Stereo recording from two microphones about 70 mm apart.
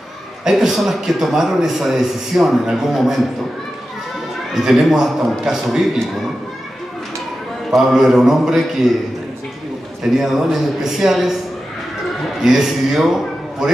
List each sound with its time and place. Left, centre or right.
0.4 s a man's voice: centre
4.6 s a man's voice: centre
7.7 s a man's voice: centre
10.1 s a man's voice: centre
12.4 s a man's voice: centre